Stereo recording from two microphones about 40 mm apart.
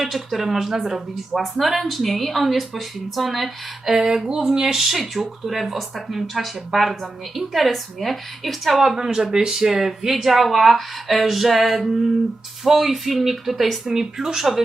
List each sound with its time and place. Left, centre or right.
0.0 s speech: centre
1.5 s speech: centre
4.0 s speech: centre
9.0 s speech: centre